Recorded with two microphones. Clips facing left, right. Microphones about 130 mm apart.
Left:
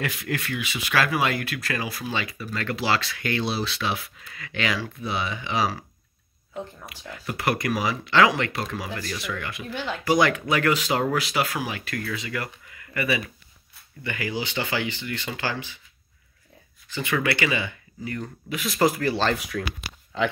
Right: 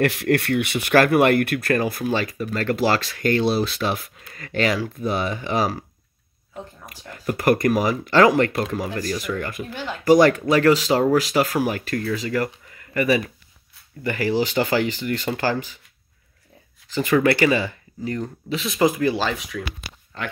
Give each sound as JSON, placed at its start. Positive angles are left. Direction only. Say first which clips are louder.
{"t": 0.0, "sound": "speech", "louder": "right 10 dB", "side_deg": -70}
{"t": 6.9, "sound": "speech", "louder": "right 6 dB", "side_deg": -45}
{"t": 16.9, "sound": "speech", "louder": "right 7 dB", "side_deg": -40}
{"t": 19.2, "sound": "speech", "louder": "left 1 dB", "side_deg": 0}